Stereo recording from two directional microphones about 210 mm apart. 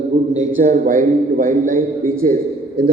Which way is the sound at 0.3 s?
40° right (ahead or behind).